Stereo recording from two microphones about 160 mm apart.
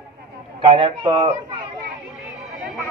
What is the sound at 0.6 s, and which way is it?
A man's voice, 30° right (ahead or behind).